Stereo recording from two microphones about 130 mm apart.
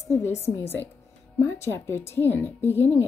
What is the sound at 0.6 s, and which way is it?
A woman's voice, 20° left (ahead or behind).